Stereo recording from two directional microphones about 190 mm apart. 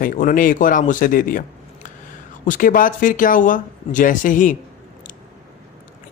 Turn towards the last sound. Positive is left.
turn(degrees=45)  # may be behind; listen again after turning